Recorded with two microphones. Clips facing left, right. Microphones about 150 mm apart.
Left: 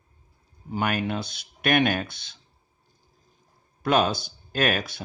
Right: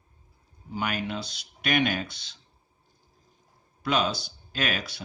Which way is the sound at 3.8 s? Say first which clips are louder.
Left 4 dB; 50° left (ahead or behind).